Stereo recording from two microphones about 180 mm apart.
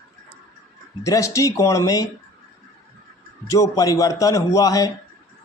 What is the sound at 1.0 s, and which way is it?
Speech, 15° left (ahead or behind).